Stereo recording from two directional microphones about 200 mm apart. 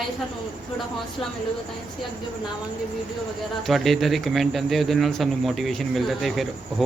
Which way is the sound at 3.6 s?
Centre (ahead or behind).